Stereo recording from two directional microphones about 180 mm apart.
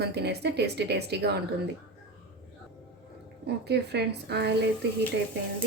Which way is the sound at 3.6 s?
65° right (ahead or behind).